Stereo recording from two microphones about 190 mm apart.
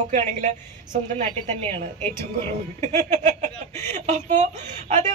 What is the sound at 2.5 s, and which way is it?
A woman's voice, 35° right (ahead or behind).